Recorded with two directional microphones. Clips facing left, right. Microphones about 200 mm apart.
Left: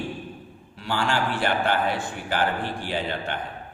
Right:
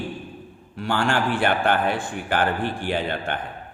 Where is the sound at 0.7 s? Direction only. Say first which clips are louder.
Right 3 dB; 55° right (ahead or behind).